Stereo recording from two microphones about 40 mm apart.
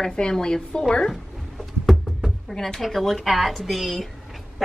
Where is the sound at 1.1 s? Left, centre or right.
Centre.